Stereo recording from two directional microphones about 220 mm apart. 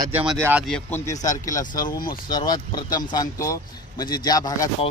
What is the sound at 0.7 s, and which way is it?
Speech, 5° left (ahead or behind).